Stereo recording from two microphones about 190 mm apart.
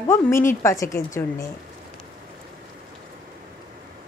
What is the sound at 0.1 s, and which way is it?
Speech, 15° left (ahead or behind).